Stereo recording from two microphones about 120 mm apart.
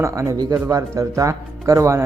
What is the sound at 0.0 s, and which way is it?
Speech, 25° right (ahead or behind).